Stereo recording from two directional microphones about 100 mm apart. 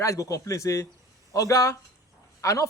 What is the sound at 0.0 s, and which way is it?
A man's voice, 35° left (ahead or behind).